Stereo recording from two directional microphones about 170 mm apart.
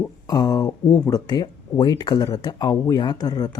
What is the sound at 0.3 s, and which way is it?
Speech, 20° left (ahead or behind).